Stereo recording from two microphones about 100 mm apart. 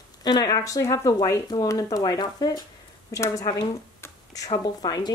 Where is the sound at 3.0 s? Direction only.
30° left (ahead or behind).